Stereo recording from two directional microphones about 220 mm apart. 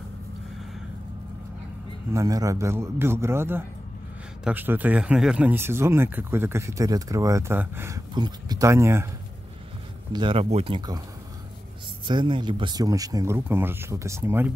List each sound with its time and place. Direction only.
2.1 s speech: 15° right (ahead or behind)
10.1 s speech: 25° right (ahead or behind)
12.1 s speech: 20° right (ahead or behind)